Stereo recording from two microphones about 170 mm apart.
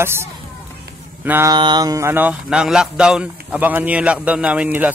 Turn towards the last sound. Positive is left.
turn(degrees=-10)  # may be behind; listen again after turning